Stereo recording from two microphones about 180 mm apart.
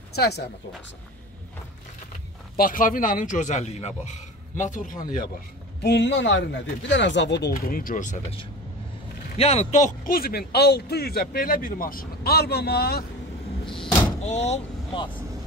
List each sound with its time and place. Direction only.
0.1 s speech: 65° left (ahead or behind)
2.5 s a man's voice: 50° left (ahead or behind)
5.8 s speech: 70° left (ahead or behind); by 8.4 s 45° left (ahead or behind)
9.4 s speech: 35° left (ahead or behind); by 13.0 s 60° left (ahead or behind)
14.2 s speech: 40° left (ahead or behind)